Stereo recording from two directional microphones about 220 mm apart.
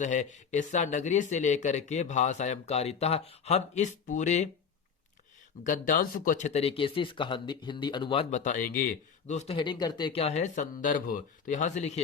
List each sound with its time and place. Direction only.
0.0 s speech: 35° left (ahead or behind)
5.6 s speech: 35° left (ahead or behind)